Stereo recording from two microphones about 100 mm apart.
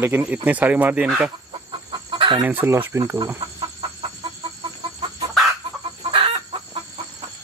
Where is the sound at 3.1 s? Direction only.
40° right (ahead or behind).